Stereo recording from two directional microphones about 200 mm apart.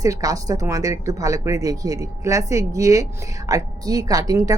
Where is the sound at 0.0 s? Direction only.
15° right (ahead or behind).